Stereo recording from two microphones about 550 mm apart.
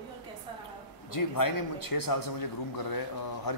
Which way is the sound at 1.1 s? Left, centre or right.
Left.